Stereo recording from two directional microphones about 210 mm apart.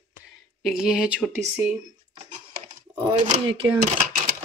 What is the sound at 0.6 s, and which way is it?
Speech, centre (ahead or behind).